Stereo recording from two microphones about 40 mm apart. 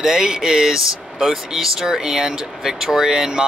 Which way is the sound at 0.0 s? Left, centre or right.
Centre.